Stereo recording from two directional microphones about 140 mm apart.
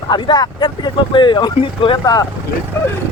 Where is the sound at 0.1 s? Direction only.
30° left (ahead or behind).